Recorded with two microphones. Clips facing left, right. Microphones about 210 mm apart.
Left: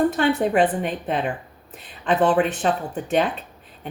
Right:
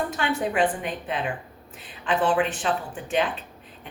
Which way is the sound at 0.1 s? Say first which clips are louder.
Left 6 dB; 40° left (ahead or behind).